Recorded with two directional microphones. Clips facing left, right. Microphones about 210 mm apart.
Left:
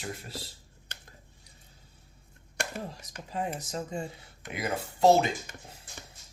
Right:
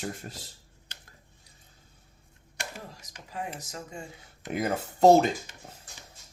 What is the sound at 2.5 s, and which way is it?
Speech, 50° left (ahead or behind).